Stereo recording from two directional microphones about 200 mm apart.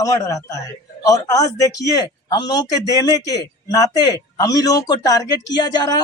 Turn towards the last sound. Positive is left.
turn(degrees=20)  # may be behind; listen again after turning